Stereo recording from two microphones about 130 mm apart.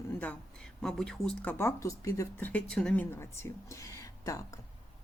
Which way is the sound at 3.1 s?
20° left (ahead or behind).